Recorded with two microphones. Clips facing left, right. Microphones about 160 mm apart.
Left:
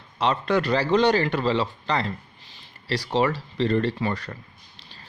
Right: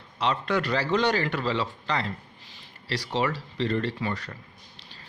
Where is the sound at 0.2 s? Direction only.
35° left (ahead or behind).